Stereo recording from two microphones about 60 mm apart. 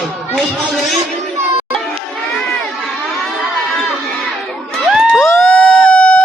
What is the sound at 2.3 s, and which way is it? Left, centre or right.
Crowd, centre.